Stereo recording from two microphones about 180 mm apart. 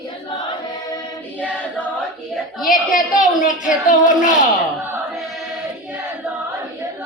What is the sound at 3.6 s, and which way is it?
Speech, 45° left (ahead or behind).